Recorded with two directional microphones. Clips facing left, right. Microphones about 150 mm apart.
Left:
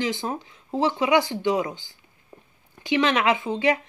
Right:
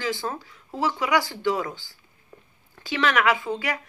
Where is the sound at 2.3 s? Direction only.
15° left (ahead or behind).